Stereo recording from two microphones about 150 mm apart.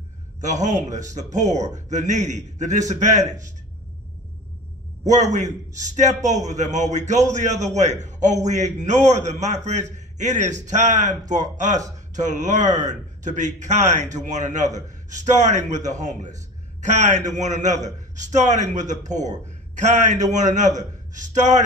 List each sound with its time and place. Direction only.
0.4 s a man's voice: 55° right (ahead or behind)
5.0 s a man's voice: 55° right (ahead or behind)